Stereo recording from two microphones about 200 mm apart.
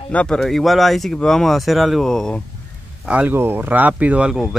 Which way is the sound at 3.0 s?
5° right (ahead or behind).